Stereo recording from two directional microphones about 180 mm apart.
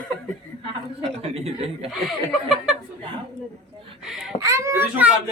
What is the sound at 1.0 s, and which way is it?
Speech, 35° right (ahead or behind).